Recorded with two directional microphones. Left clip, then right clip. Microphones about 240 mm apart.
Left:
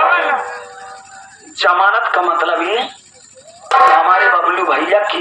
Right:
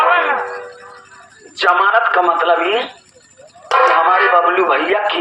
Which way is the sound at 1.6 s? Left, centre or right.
Centre.